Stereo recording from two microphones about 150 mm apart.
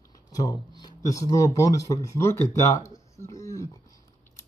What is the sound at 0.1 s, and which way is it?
Speech, 25° left (ahead or behind).